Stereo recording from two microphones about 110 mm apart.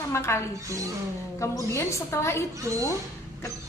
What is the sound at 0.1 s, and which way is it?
Speech, 25° left (ahead or behind).